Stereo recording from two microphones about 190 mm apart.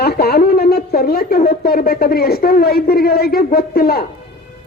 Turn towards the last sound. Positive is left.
turn(degrees=55)  # may be behind; listen again after turning